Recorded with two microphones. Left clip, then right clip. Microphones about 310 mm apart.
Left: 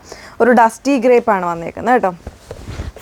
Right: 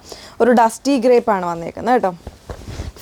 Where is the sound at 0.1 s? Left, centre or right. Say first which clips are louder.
Left 2 dB; left.